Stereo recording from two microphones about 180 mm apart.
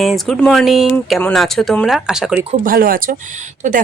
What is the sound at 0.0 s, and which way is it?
Speech, centre (ahead or behind).